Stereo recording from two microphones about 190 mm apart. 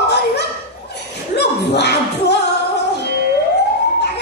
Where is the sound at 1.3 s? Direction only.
60° left (ahead or behind).